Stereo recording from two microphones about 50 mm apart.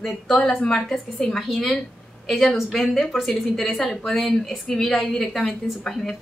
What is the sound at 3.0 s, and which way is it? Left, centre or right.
A woman's voice, centre.